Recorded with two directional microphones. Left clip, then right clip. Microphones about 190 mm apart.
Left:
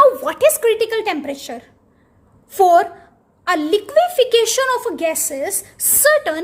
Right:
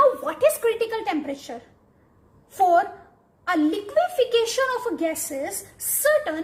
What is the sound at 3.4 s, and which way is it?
A woman's voice, 55° left (ahead or behind).